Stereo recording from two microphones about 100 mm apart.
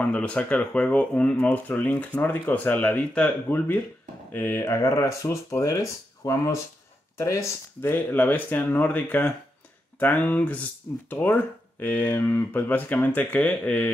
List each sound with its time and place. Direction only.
0.0 s speech: 15° left (ahead or behind)